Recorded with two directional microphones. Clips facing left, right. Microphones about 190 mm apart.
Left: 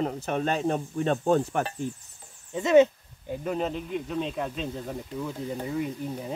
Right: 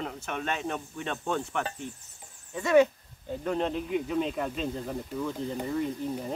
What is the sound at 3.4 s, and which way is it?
Speech, 5° left (ahead or behind).